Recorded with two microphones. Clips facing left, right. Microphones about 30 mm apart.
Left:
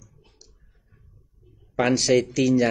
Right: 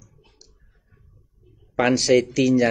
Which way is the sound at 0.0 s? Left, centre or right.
Centre.